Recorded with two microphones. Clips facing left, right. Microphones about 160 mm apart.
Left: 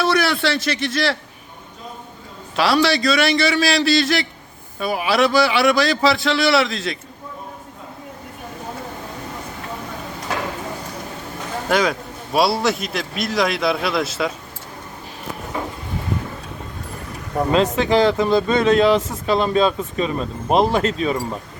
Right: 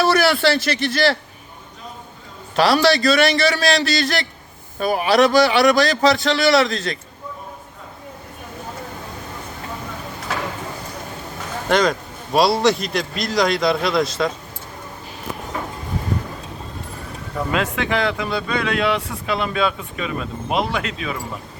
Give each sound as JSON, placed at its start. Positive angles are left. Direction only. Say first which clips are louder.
{"t": 0.0, "sound": "a man's voice", "louder": "right 2 dB", "side_deg": 0}
{"t": 2.6, "sound": "a man's voice", "louder": "right 2 dB", "side_deg": 0}
{"t": 11.7, "sound": "a man's voice", "louder": "right 2 dB", "side_deg": 5}
{"t": 17.5, "sound": "speech", "louder": "left 5 dB", "side_deg": 35}